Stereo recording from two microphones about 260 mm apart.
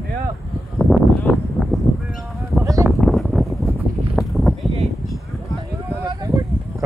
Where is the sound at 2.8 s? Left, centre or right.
Centre.